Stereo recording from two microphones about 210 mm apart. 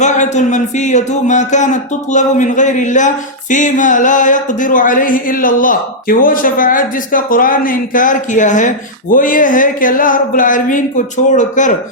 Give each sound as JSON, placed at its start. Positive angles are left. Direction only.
{"t": 0.0, "sound": "speech", "side_deg": 35}